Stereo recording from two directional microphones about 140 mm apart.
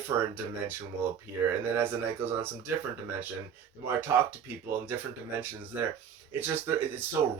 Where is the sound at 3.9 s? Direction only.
15° right (ahead or behind).